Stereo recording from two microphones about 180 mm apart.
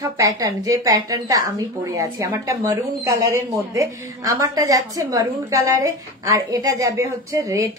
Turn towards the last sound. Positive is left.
turn(degrees=-20)  # may be behind; listen again after turning